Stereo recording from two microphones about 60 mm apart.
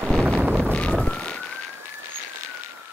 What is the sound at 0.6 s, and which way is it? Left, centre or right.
Clip-clop, centre.